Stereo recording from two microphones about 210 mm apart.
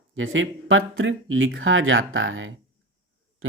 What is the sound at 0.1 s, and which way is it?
Speech, 65° right (ahead or behind).